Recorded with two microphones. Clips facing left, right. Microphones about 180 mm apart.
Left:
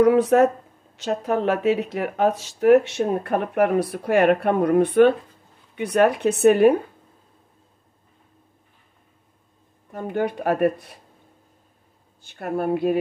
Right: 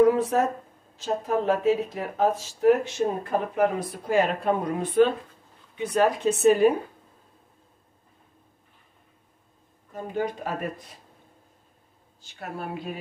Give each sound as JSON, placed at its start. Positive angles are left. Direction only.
{"t": 0.0, "sound": "a sound", "side_deg": 75}
{"t": 0.9, "sound": "speech", "side_deg": 75}
{"t": 9.9, "sound": "speech", "side_deg": 65}
{"t": 12.2, "sound": "speech", "side_deg": 55}